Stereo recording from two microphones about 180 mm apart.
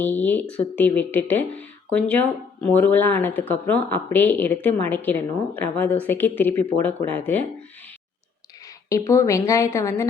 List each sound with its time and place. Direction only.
0.0 s speech: 10° left (ahead or behind)
8.9 s speech: 15° left (ahead or behind)